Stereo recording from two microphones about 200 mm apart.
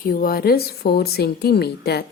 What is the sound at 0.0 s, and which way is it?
A woman's voice, 45° left (ahead or behind).